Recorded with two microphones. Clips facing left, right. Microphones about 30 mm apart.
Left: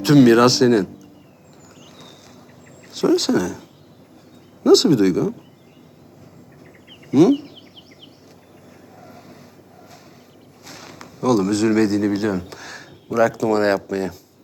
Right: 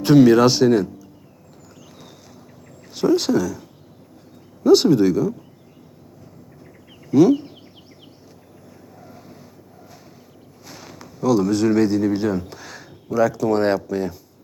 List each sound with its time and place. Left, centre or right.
0.0 s speech: centre
2.9 s speech: centre
6.9 s bird: centre
9.0 s vehicle: centre
10.7 s a man's voice: centre